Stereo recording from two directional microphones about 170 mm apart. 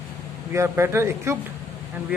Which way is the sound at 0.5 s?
15° right (ahead or behind).